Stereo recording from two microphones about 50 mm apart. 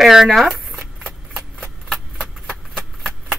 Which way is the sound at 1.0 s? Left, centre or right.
Centre.